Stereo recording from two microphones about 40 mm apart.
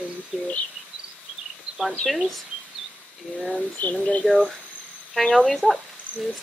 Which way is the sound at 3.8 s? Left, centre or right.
Left.